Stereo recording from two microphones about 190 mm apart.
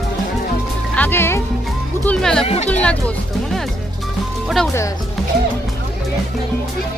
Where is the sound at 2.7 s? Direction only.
5° left (ahead or behind).